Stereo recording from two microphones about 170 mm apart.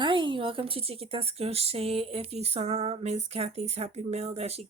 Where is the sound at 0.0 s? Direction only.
30° right (ahead or behind).